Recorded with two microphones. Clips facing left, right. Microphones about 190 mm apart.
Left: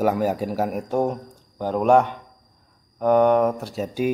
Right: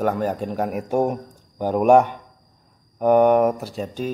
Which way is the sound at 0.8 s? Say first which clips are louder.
Right 2 dB; 15° right (ahead or behind).